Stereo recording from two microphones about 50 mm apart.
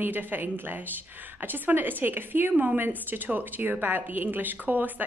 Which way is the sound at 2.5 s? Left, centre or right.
Right.